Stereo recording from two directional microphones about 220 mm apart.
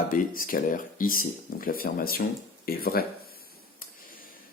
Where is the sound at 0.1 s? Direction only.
40° left (ahead or behind).